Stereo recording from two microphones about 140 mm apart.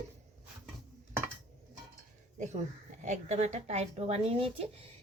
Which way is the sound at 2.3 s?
60° right (ahead or behind).